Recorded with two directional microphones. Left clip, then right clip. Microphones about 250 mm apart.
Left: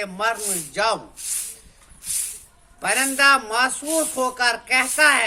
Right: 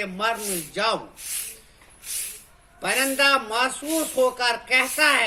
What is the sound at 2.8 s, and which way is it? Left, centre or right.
Speech, left.